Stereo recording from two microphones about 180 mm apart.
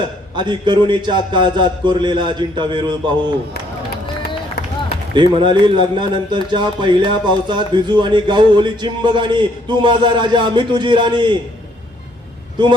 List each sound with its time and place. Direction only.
0.3 s speech: 25° right (ahead or behind)
5.1 s speech: 25° right (ahead or behind)